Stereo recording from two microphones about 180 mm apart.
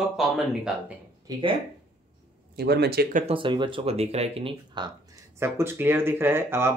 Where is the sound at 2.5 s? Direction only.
65° right (ahead or behind).